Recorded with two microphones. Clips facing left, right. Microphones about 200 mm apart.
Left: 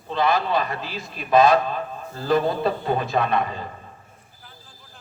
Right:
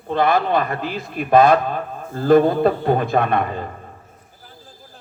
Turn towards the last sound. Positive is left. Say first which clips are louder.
# right 4 dB
turn(degrees=-50)  # may be behind; listen again after turning